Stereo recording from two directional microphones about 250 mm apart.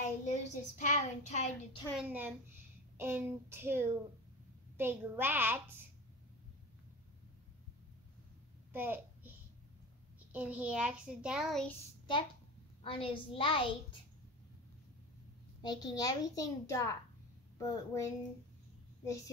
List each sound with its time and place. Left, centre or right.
0.0 s speech: left
2.0 s speech: centre
8.7 s a child's voice: centre
10.3 s a child's voice: centre
12.8 s a woman's voice: left
15.6 s a child's voice: centre